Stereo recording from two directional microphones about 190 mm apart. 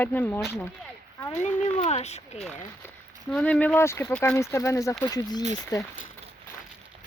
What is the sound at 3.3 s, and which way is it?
Speech, 5° left (ahead or behind).